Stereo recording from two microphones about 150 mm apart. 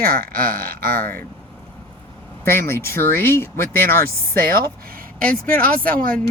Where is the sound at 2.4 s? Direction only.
15° left (ahead or behind).